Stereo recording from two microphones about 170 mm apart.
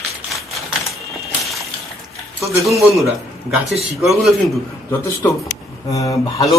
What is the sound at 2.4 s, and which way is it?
Speech, 20° right (ahead or behind).